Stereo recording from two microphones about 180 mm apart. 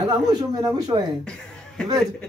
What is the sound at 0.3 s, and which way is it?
Speech, 20° right (ahead or behind).